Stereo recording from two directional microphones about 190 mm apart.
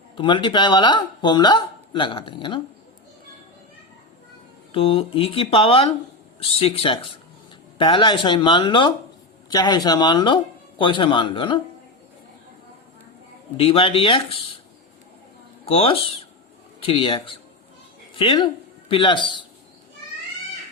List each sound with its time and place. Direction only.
0.2 s speech: 25° left (ahead or behind)
4.7 s speech: 30° left (ahead or behind)
13.6 s speech: 30° left (ahead or behind)
15.6 s speech: 30° left (ahead or behind)